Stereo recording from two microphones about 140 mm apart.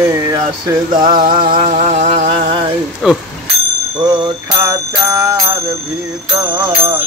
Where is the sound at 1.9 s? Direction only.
50° right (ahead or behind).